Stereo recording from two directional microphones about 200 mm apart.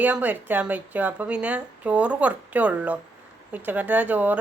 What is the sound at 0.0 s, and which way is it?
A woman's voice, 10° right (ahead or behind).